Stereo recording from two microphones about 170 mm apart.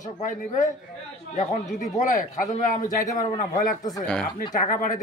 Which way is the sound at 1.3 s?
45° left (ahead or behind).